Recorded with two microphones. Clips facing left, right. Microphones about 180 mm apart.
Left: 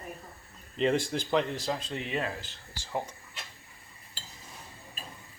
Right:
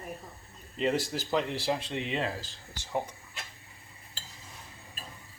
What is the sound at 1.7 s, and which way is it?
Speech, 20° right (ahead or behind).